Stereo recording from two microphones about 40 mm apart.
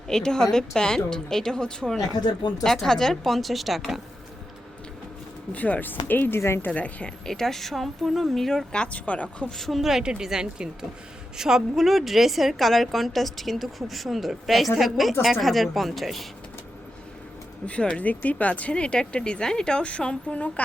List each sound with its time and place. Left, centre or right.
0.1 s a woman's voice: centre
5.5 s speech: left
5.8 s speech: left
6.3 s a woman's voice: left
6.7 s speech: left
7.3 s a woman's voice: centre
8.7 s speech: left
9.6 s a woman's voice: centre
10.0 s a woman's voice: right; by 16.2 s centre
17.7 s speech: left
18.0 s speech: left